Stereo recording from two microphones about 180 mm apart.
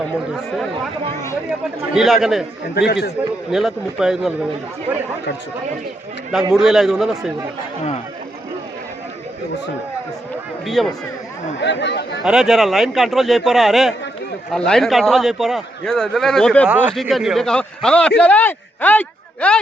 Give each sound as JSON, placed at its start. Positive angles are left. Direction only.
{"t": 1.9, "sound": "a man's voice", "side_deg": 0}
{"t": 2.7, "sound": "speech", "side_deg": 65}
{"t": 3.5, "sound": "a man's voice", "side_deg": 0}
{"t": 6.5, "sound": "a man's voice", "side_deg": 0}
{"t": 10.7, "sound": "a man's voice", "side_deg": 0}
{"t": 11.6, "sound": "speech", "side_deg": 75}
{"t": 12.2, "sound": "a man's voice", "side_deg": -5}
{"t": 16.6, "sound": "a man's voice", "side_deg": -10}